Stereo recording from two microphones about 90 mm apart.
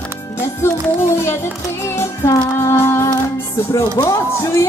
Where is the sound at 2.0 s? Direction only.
30° left (ahead or behind).